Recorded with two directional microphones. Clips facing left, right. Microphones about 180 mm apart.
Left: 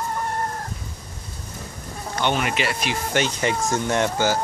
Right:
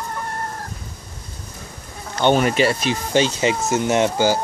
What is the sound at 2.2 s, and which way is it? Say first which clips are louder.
Speech: right 7 dB; 35° right (ahead or behind).